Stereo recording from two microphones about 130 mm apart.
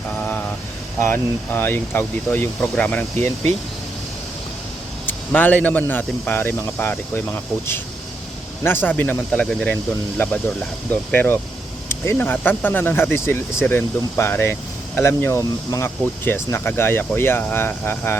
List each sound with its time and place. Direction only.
1.1 s speech: 15° left (ahead or behind)
5.0 s speech: 15° left (ahead or behind)